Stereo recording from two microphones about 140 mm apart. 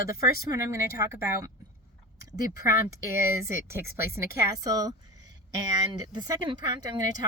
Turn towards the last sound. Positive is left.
turn(degrees=-30)  # may be behind; listen again after turning